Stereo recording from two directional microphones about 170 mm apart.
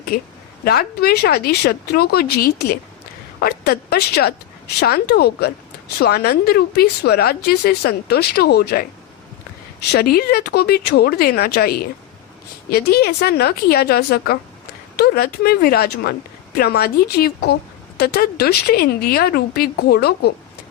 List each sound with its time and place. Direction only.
0.6 s a woman's voice: 65° left (ahead or behind)
9.9 s a woman's voice: 65° left (ahead or behind)